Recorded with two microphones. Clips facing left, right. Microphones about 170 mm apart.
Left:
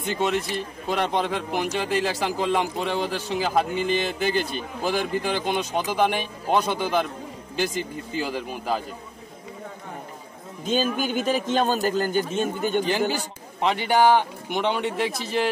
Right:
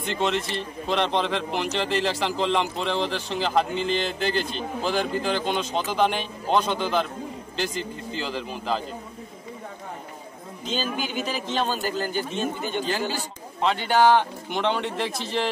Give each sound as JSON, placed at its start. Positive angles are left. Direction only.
{"t": 0.1, "sound": "a man's voice", "side_deg": 10}
{"t": 10.6, "sound": "a man's voice", "side_deg": 50}
{"t": 13.6, "sound": "a man's voice", "side_deg": 15}